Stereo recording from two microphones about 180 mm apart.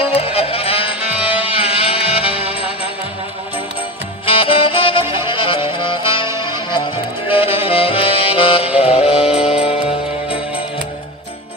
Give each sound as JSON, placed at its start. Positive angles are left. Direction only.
{"t": 0.0, "sound": "music", "side_deg": 30}
{"t": 4.4, "sound": "music", "side_deg": 30}